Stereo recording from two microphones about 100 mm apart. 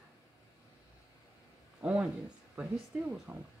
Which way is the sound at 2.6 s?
15° right (ahead or behind).